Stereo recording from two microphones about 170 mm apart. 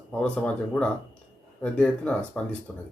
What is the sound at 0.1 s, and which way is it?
Speech, 5° left (ahead or behind).